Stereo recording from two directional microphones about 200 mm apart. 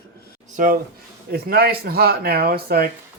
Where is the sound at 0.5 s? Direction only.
45° right (ahead or behind).